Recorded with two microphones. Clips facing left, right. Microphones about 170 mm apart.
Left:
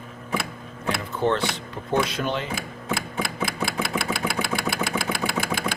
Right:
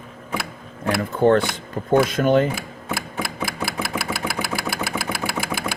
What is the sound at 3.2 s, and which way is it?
Engine, 5° right (ahead or behind).